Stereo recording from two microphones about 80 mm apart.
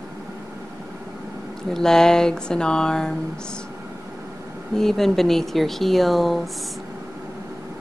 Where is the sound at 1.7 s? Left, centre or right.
Centre.